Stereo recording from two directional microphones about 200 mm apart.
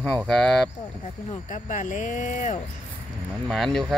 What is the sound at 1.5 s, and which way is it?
Speech, 40° left (ahead or behind).